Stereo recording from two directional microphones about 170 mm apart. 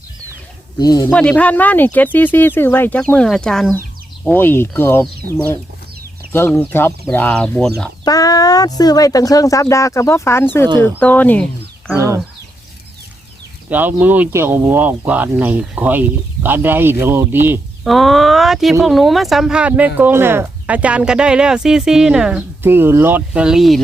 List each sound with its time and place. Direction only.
0.8 s speech: 25° left (ahead or behind)
1.1 s speech: 5° left (ahead or behind)
5.2 s speech: 60° right (ahead or behind)
6.3 s speech: 15° left (ahead or behind)
8.0 s speech: 20° left (ahead or behind)
11.9 s speech: 15° right (ahead or behind)
13.7 s speech: 10° right (ahead or behind)
17.8 s speech: centre (ahead or behind)